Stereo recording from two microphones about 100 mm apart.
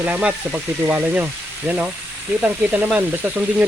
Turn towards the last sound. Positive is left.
turn(degrees=-15)  # may be behind; listen again after turning